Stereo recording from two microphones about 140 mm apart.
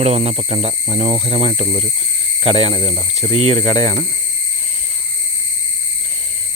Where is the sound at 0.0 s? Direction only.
50° right (ahead or behind).